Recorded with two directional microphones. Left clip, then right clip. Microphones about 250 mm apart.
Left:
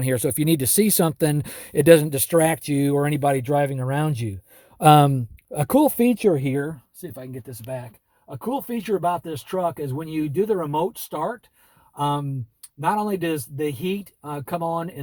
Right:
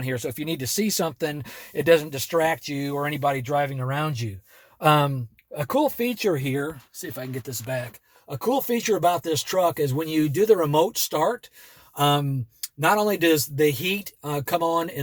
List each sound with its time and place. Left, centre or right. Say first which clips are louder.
0.0 s speech: left 6 dB; left
8.3 s speech: right 4 dB; centre